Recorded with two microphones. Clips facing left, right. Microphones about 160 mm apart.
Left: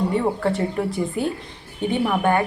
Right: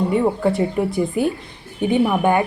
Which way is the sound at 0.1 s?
10° right (ahead or behind).